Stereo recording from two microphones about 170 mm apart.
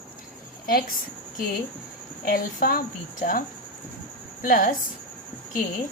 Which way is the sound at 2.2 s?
55° left (ahead or behind).